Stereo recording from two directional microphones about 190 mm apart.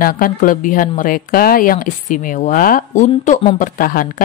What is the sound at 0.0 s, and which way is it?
Speech, 50° left (ahead or behind).